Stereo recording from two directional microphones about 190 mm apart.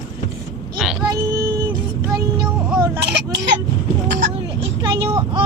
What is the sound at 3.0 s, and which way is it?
Speech, 60° right (ahead or behind).